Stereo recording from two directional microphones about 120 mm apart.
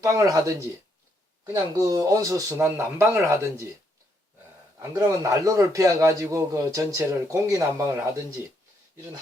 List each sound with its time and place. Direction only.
0.0 s a man's voice: 30° right (ahead or behind)
1.7 s a man's voice: 30° right (ahead or behind)
4.8 s a man's voice: 30° right (ahead or behind)